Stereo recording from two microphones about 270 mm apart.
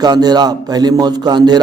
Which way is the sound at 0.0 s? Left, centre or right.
Centre.